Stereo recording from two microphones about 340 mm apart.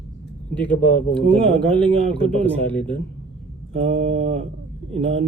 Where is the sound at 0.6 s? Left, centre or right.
Centre.